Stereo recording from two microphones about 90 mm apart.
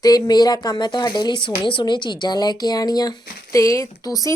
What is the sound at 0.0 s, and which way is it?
Speech, 50° left (ahead or behind).